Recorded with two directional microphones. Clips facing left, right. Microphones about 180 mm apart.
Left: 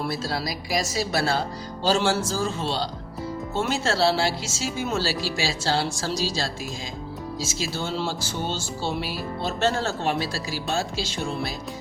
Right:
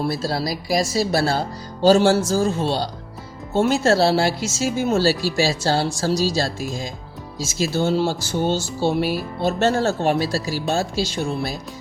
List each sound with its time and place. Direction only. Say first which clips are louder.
0.0 s a woman's voice: right 5 dB; 35° right (ahead or behind)